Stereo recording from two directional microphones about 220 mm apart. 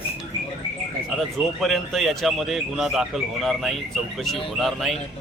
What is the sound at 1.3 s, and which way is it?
Speech, centre (ahead or behind).